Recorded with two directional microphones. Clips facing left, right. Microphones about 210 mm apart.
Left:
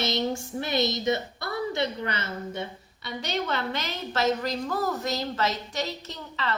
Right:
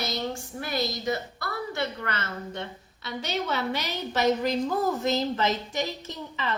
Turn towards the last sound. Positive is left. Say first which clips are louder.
# even
turn(degrees=-20)  # may be behind; listen again after turning